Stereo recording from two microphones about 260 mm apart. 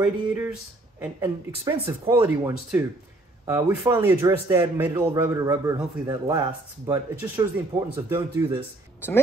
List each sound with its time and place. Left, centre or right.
0.0 s a man's voice: centre